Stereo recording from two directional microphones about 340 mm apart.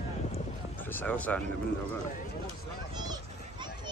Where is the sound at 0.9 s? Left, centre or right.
Centre.